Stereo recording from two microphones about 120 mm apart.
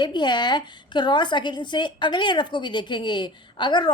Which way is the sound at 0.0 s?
40° left (ahead or behind).